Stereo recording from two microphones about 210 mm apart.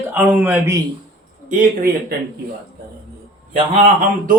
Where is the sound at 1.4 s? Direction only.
45° right (ahead or behind).